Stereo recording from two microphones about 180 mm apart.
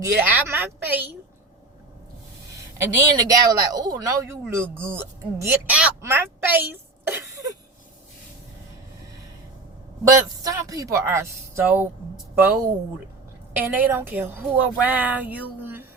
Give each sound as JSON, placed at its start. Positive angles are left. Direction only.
{"t": 0.0, "sound": "speech", "side_deg": -10}
{"t": 2.8, "sound": "speech", "side_deg": -20}
{"t": 7.1, "sound": "a sound", "side_deg": -15}
{"t": 10.0, "sound": "speech", "side_deg": -15}
{"t": 13.7, "sound": "speech", "side_deg": -10}